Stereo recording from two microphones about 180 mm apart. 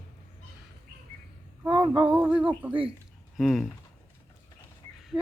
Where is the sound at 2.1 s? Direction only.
5° right (ahead or behind).